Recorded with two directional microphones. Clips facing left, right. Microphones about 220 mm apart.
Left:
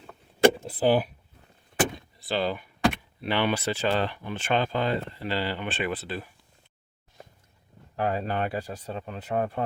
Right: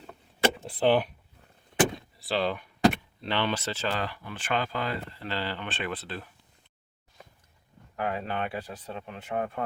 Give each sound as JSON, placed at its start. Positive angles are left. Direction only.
{"t": 0.8, "sound": "speech", "side_deg": 5}
{"t": 2.0, "sound": "door", "side_deg": 0}
{"t": 3.2, "sound": "speech", "side_deg": 10}
{"t": 3.9, "sound": "speech", "side_deg": 25}
{"t": 5.2, "sound": "speech", "side_deg": 15}
{"t": 7.9, "sound": "speech", "side_deg": 35}